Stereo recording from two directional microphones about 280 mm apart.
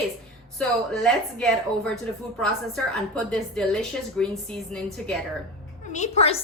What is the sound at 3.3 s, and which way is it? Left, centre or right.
A woman's voice, centre.